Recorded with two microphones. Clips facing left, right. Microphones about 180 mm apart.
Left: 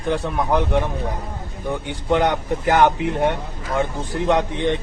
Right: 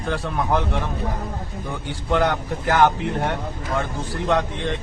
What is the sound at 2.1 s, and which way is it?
Speech, 20° left (ahead or behind).